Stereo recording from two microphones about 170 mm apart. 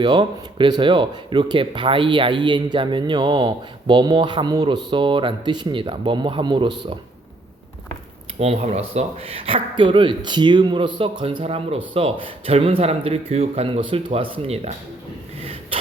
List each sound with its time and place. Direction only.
0.0 s speech: 30° right (ahead or behind)
8.4 s speech: 40° right (ahead or behind)